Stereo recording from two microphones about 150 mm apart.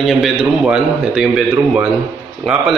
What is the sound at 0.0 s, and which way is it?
A man's voice, centre (ahead or behind).